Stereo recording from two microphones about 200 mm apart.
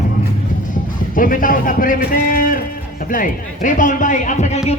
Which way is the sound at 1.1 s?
45° left (ahead or behind).